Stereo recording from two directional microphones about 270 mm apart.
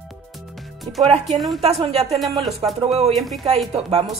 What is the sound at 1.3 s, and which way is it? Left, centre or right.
Speech, centre.